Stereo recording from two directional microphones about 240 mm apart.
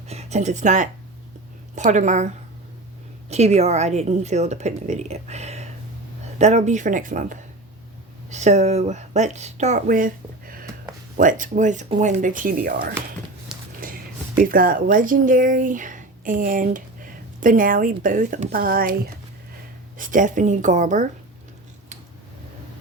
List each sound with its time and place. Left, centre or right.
0.1 s a woman's voice: right
13.5 s a sound: centre
14.5 s speech: right